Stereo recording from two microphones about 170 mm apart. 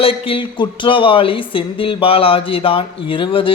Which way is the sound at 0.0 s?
35° left (ahead or behind).